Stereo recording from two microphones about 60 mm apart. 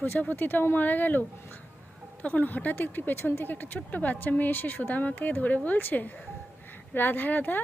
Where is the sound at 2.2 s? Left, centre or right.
Left.